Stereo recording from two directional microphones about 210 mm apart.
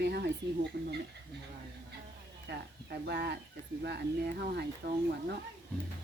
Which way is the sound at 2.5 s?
55° right (ahead or behind).